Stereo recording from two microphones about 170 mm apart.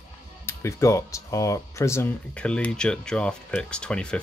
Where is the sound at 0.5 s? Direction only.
15° left (ahead or behind).